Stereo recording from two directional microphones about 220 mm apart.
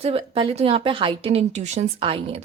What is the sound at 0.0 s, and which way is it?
A woman's voice, 25° right (ahead or behind).